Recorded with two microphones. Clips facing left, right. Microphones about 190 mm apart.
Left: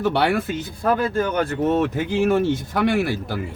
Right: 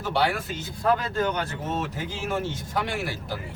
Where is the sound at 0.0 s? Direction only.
60° left (ahead or behind).